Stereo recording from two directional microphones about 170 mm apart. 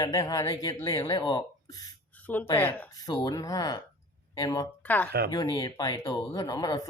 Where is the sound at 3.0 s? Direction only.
25° left (ahead or behind).